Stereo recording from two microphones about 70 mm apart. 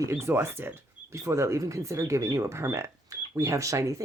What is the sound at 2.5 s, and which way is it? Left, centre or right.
Speech, right.